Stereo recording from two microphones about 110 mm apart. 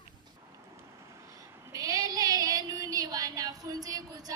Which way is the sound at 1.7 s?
35° right (ahead or behind).